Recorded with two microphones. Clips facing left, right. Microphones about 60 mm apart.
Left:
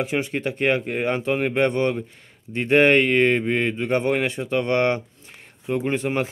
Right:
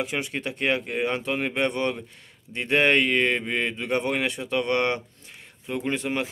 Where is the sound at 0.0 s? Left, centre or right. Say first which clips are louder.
Left 5 dB; left.